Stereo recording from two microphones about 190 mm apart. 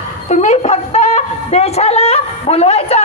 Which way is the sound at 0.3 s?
40° left (ahead or behind).